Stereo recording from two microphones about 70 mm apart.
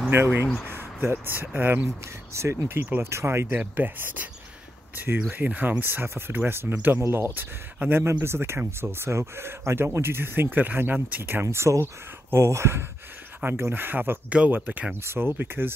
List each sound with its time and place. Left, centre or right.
0.1 s speech: right
2.3 s speech: right
3.4 s speech: right
7.0 s speech: right
11.4 s speech: right
13.4 s speech: right